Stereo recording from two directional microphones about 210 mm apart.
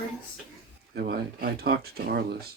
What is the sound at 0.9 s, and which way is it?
Speech, 50° right (ahead or behind).